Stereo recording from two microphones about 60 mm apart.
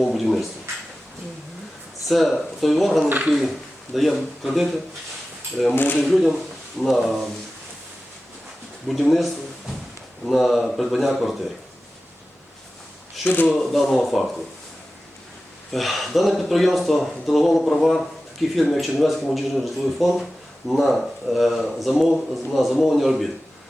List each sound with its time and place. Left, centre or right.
0.0 s speech: centre
2.0 s a man's voice: centre
5.7 s speech: left
6.1 s a man's voice: centre
8.9 s a man's voice: centre
13.2 s speech: left
13.5 s a man's voice: centre
15.7 s a man's voice: centre